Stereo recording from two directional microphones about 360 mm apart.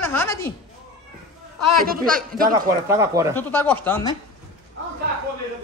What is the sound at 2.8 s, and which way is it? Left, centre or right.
Speech, centre.